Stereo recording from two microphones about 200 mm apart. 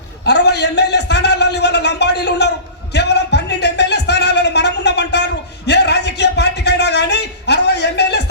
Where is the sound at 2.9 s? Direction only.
55° left (ahead or behind).